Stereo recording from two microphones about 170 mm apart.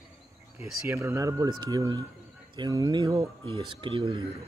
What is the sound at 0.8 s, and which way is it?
Speech, 15° right (ahead or behind).